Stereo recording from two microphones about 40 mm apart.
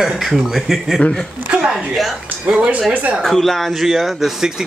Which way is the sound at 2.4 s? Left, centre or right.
Right.